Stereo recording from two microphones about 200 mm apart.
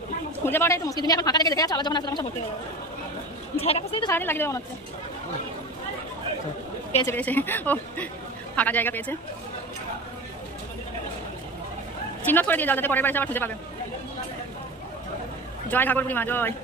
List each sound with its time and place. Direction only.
0.4 s a woman's voice: 10° left (ahead or behind)
3.6 s a woman's voice: 30° left (ahead or behind)
4.1 s speech: 10° left (ahead or behind)
7.0 s speech: 10° left (ahead or behind)
12.2 s speech: 10° left (ahead or behind)
15.7 s speech: 10° left (ahead or behind)